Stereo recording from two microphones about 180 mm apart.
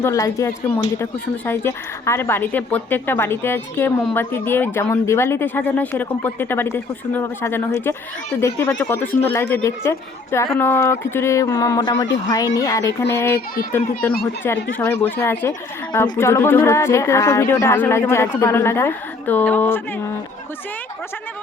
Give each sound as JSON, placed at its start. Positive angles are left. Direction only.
{"t": 0.0, "sound": "a woman's voice", "side_deg": 15}